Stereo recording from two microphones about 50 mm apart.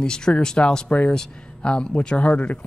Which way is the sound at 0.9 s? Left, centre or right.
Left.